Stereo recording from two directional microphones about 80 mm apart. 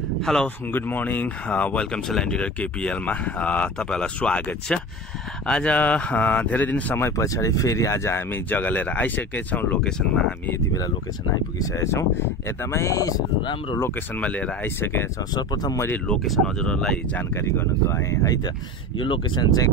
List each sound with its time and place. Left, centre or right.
0.2 s speech: centre
0.7 s speech: left
7.1 s speech: left
9.8 s speech: centre
11.5 s speech: left
13.4 s speech: left
13.7 s speech: left
14.2 s speech: centre
14.8 s speech: left
15.3 s speech: left
16.3 s speech: centre
17.2 s speech: left
18.2 s speech: left
18.9 s speech: left